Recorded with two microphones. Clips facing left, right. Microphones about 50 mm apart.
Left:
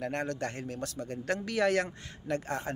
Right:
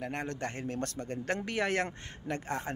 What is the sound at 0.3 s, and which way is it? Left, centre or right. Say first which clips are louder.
A man's voice: left 1 dB; right.